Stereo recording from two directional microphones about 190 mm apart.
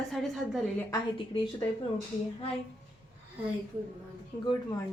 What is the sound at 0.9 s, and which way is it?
Speech, 30° left (ahead or behind).